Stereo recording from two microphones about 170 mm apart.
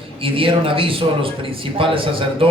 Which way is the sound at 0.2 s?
30° right (ahead or behind).